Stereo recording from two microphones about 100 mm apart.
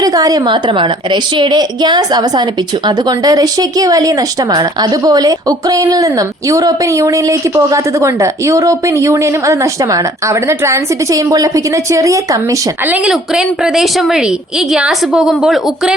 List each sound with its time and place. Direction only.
0.0 s a woman's voice: 35° right (ahead or behind)
0.4 s a woman's voice: 55° right (ahead or behind); by 12.5 s 35° right (ahead or behind)
12.8 s a woman's voice: 15° right (ahead or behind)